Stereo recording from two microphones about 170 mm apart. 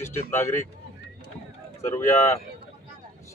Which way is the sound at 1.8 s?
15° left (ahead or behind).